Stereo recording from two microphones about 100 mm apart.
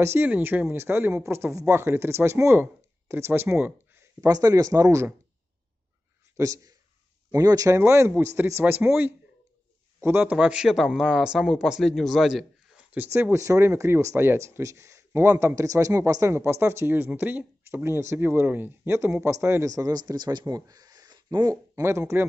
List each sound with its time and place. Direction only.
0.0 s speech: 25° right (ahead or behind)
4.3 s speech: 35° right (ahead or behind)
6.3 s speech: 35° right (ahead or behind)
10.3 s a man's voice: 10° right (ahead or behind)
12.9 s speech: 20° right (ahead or behind)